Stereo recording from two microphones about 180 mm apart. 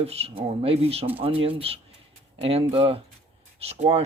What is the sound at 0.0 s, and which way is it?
Speech, 35° right (ahead or behind).